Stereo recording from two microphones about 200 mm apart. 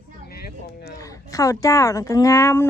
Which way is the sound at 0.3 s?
50° left (ahead or behind).